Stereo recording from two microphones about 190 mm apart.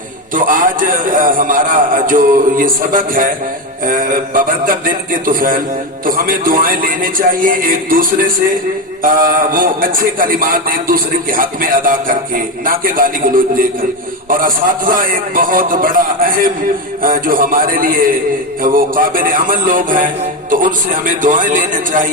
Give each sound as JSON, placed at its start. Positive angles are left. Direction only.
{"t": 0.3, "sound": "a man's voice", "side_deg": -45}